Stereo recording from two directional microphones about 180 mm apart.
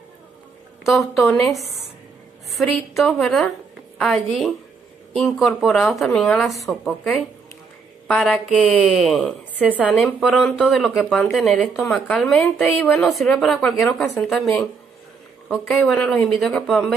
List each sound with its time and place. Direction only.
0.8 s speech: centre (ahead or behind)
2.5 s a woman's voice: centre (ahead or behind)